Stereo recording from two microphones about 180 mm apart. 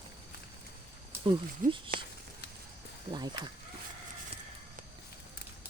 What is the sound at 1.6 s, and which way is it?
Speech, 50° right (ahead or behind).